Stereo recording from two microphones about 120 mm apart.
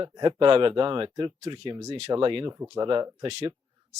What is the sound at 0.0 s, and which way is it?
Speech, 40° right (ahead or behind).